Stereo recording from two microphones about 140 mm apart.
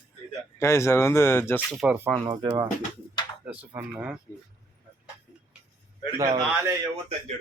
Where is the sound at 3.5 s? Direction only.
5° right (ahead or behind).